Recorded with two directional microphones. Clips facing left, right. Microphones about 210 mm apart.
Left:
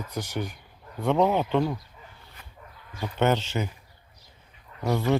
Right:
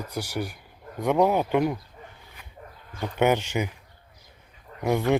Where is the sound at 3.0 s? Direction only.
15° right (ahead or behind).